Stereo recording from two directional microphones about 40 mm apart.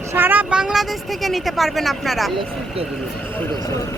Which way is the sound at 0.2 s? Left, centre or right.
Right.